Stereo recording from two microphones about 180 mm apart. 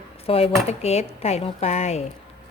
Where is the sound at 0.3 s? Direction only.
30° left (ahead or behind).